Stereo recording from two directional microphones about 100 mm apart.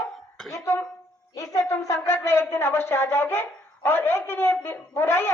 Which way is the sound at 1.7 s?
30° left (ahead or behind).